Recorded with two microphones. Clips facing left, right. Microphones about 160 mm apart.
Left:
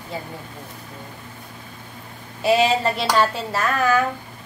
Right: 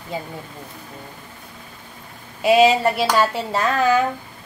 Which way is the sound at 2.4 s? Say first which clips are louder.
Right 3 dB; 15° right (ahead or behind).